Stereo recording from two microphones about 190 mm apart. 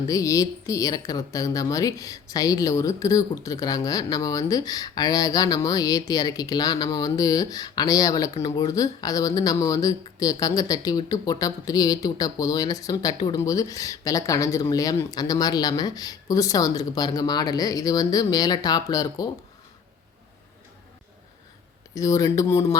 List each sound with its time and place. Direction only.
0.1 s speech: 15° left (ahead or behind)
21.9 s speech: 15° left (ahead or behind)